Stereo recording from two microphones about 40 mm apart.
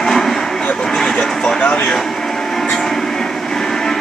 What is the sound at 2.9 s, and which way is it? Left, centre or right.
Train, centre.